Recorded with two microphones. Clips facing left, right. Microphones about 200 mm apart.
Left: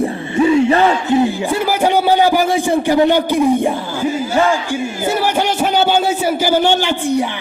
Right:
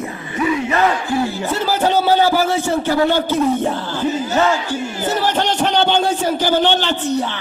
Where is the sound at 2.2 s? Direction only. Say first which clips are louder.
Left 2 dB; 15° left (ahead or behind).